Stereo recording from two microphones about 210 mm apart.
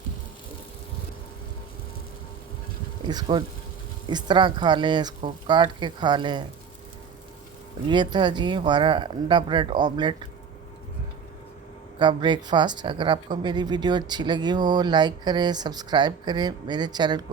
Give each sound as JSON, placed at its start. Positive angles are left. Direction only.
{"t": 3.1, "sound": "speech", "side_deg": -20}
{"t": 7.9, "sound": "speech", "side_deg": -20}
{"t": 11.9, "sound": "speech", "side_deg": -20}